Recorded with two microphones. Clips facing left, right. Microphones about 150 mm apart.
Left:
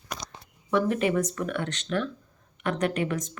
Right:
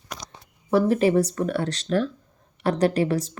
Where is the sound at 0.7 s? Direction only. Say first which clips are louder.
Right 5 dB; 35° right (ahead or behind).